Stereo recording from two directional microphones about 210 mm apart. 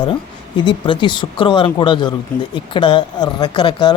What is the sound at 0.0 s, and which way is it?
Speech, 20° left (ahead or behind).